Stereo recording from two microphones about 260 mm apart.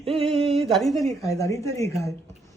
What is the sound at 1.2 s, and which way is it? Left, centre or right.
Speech, centre.